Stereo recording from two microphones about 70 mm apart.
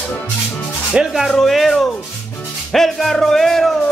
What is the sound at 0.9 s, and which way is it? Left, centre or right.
Speech, centre.